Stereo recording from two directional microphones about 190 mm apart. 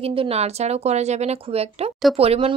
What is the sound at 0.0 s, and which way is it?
A woman's voice, 30° right (ahead or behind).